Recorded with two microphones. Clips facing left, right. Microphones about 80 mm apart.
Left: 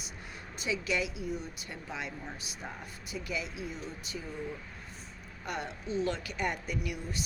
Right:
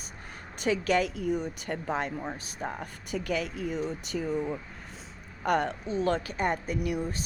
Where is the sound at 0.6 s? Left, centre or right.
Right.